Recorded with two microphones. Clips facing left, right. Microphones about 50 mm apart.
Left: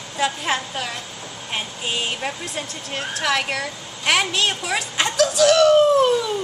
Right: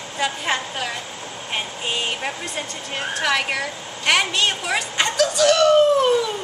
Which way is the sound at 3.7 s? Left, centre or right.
Right.